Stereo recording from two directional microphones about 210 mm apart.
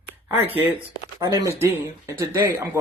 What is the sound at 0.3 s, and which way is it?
Speech, 10° right (ahead or behind).